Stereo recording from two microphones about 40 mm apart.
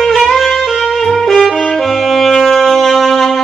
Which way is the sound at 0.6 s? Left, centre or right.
Centre.